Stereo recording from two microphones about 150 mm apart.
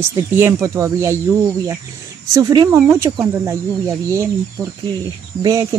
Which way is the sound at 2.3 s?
25° right (ahead or behind).